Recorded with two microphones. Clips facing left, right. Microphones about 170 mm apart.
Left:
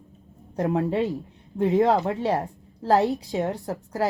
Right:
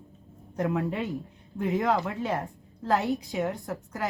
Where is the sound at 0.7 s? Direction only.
35° left (ahead or behind).